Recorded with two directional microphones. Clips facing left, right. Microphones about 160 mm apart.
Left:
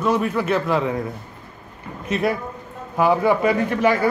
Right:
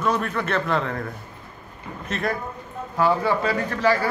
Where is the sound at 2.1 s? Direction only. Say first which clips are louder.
Left 5 dB; 10° left (ahead or behind).